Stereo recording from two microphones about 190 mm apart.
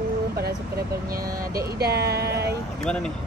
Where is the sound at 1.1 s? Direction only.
50° right (ahead or behind).